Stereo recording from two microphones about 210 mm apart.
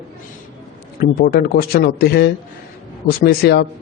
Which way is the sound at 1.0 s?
45° left (ahead or behind).